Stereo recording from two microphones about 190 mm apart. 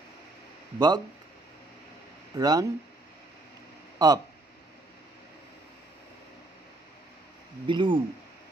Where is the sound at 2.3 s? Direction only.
20° right (ahead or behind).